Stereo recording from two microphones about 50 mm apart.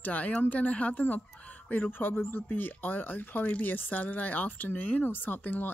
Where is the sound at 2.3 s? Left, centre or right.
Left.